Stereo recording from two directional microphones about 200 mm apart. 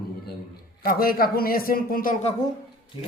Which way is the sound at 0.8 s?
45° left (ahead or behind).